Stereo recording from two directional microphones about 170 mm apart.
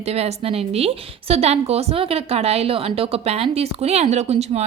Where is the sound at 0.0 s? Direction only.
40° right (ahead or behind).